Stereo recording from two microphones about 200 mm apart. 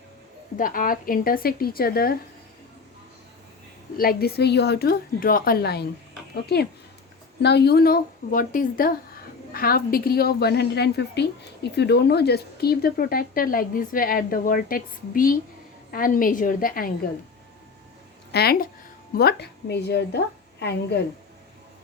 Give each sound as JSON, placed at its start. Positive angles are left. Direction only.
{"t": 0.5, "sound": "a woman's voice", "side_deg": 45}
{"t": 3.9, "sound": "a woman's voice", "side_deg": 50}
{"t": 18.3, "sound": "a woman's voice", "side_deg": 55}